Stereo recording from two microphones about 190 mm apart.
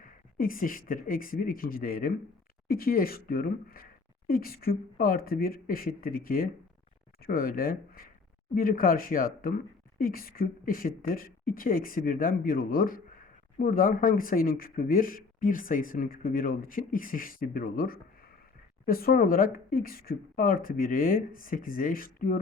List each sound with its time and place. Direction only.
0.0 s speech: 45° left (ahead or behind)